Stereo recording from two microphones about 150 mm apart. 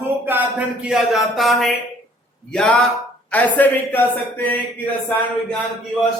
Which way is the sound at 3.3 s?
10° left (ahead or behind).